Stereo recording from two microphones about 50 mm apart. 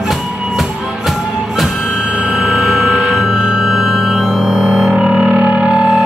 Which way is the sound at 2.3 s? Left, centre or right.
Centre.